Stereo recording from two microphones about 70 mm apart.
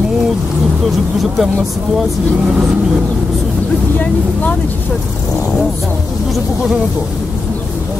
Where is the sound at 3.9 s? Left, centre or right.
Left.